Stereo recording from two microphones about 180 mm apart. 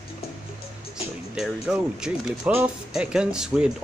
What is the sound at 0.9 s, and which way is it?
Speech, 5° right (ahead or behind).